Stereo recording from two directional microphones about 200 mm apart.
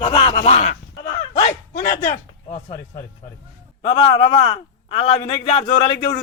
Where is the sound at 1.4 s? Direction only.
45° left (ahead or behind).